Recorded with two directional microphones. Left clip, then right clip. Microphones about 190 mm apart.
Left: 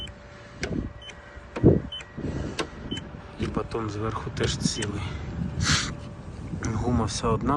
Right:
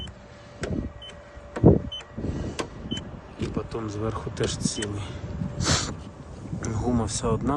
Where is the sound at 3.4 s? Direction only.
5° right (ahead or behind).